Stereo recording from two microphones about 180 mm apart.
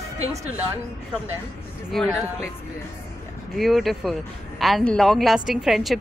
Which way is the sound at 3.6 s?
Centre (ahead or behind).